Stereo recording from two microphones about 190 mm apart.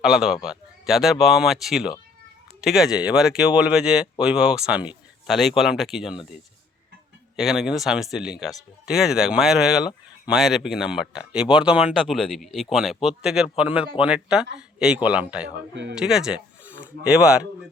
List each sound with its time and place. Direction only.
0.0 s speech: 5° right (ahead or behind)
7.3 s speech: centre (ahead or behind)
15.7 s speech: 70° right (ahead or behind)
16.0 s speech: 5° right (ahead or behind)